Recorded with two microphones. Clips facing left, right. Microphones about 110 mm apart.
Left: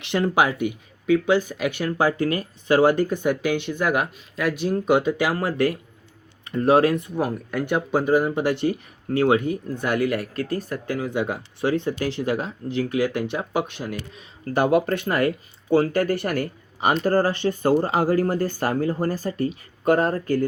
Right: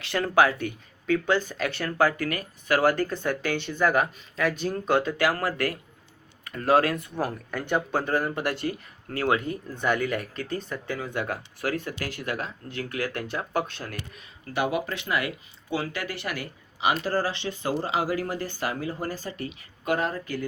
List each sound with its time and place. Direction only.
0.0 s speech: 20° left (ahead or behind)
9.5 s speech: 10° left (ahead or behind)
14.5 s speech: 45° left (ahead or behind)